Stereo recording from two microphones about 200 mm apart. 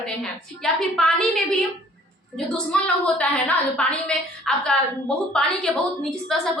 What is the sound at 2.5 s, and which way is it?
A woman's voice, 5° left (ahead or behind).